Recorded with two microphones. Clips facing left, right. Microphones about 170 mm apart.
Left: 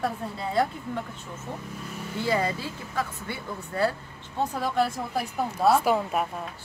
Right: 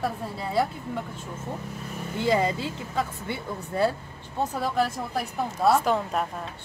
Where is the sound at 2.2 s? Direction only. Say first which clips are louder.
Right 3 dB; 20° right (ahead or behind).